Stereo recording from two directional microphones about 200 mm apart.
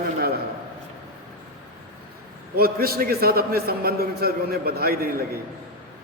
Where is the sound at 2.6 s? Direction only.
50° right (ahead or behind).